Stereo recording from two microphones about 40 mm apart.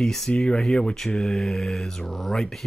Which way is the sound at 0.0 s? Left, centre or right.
Centre.